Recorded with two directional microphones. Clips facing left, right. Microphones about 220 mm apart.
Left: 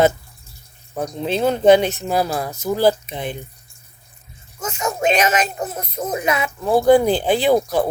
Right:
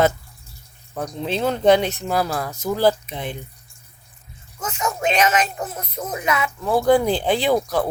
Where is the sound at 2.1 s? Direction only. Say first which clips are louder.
Left 1 dB; 25° left (ahead or behind).